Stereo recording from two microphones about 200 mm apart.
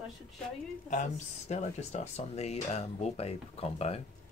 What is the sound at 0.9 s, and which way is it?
Speech, 35° left (ahead or behind).